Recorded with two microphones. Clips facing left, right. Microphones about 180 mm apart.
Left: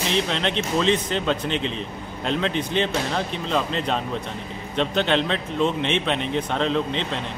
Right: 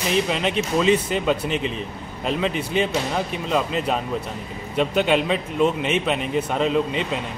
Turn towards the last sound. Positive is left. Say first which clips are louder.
# right 2 dB
turn(degrees=-5)  # may be behind; listen again after turning